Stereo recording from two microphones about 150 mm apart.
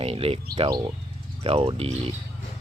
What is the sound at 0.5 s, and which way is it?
Speech, 30° right (ahead or behind).